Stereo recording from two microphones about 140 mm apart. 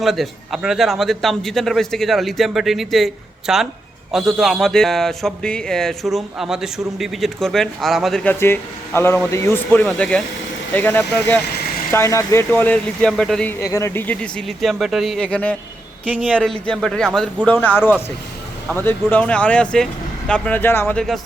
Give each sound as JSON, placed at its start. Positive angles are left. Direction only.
{"t": 0.0, "sound": "a man's voice", "side_deg": 0}
{"t": 8.2, "sound": "speech", "side_deg": 15}
{"t": 9.8, "sound": "a man's voice", "side_deg": 5}
{"t": 13.5, "sound": "a man's voice", "side_deg": 20}